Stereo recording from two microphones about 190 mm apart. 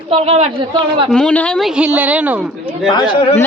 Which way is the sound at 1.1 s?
5° left (ahead or behind).